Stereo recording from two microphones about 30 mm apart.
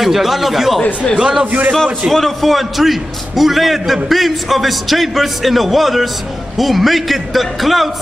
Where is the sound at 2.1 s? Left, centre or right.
Centre.